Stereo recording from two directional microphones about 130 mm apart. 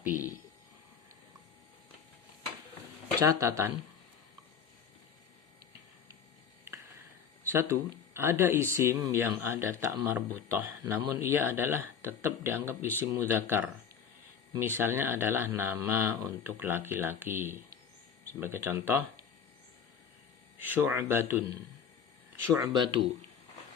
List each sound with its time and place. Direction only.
3.2 s speech: 25° right (ahead or behind)
7.5 s speech: 20° right (ahead or behind)
10.1 s speech: 15° right (ahead or behind)
20.6 s speech: 15° right (ahead or behind)
22.5 s speech: 30° right (ahead or behind)